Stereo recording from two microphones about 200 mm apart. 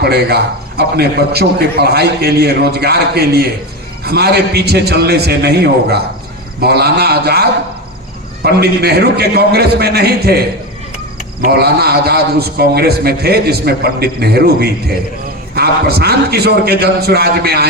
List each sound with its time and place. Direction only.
0.0 s a man's voice: 55° right (ahead or behind)
11.4 s a man's voice: 50° right (ahead or behind)